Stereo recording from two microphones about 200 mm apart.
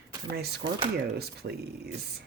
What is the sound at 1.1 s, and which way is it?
Speech, 55° right (ahead or behind).